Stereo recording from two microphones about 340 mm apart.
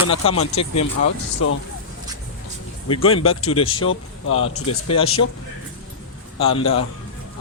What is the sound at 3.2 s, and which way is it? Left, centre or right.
Speech, left.